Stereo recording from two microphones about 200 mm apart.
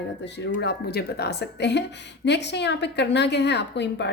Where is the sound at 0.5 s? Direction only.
55° left (ahead or behind).